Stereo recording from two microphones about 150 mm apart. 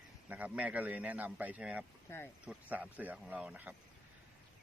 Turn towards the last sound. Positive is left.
turn(degrees=-10)  # may be behind; listen again after turning